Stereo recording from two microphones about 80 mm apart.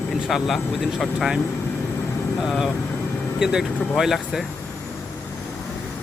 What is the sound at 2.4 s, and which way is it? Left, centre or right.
Speech, centre.